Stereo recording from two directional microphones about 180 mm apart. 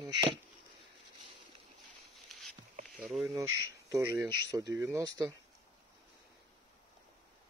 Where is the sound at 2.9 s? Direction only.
5° right (ahead or behind).